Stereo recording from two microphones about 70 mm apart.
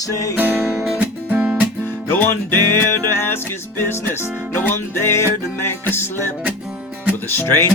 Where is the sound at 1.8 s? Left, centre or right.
Left.